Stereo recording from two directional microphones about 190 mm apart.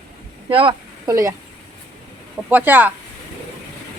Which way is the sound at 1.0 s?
15° right (ahead or behind).